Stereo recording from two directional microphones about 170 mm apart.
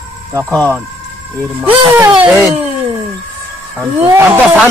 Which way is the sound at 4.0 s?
10° right (ahead or behind).